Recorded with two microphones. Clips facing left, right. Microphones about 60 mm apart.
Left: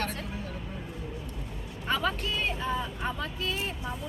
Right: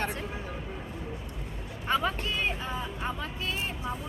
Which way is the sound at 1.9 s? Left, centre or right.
Centre.